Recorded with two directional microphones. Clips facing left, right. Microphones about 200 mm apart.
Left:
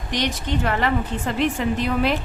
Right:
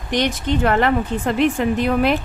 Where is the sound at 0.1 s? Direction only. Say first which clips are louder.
Right 5 dB; 55° right (ahead or behind).